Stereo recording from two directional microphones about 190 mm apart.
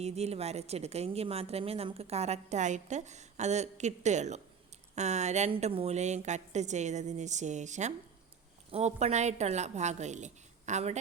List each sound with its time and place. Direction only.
0.0 s a woman's voice: 35° right (ahead or behind)